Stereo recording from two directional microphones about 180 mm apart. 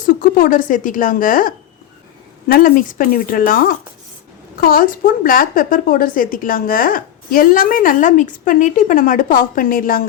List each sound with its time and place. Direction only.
0.0 s a woman's voice: 50° left (ahead or behind)